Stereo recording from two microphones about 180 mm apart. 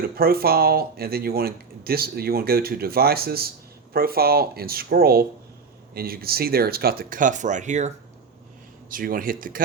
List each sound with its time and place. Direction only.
0.2 s speech: 55° right (ahead or behind)